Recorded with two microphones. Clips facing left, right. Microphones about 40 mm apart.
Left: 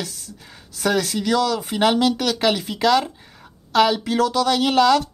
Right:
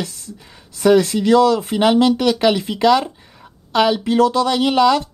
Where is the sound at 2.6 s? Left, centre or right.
Right.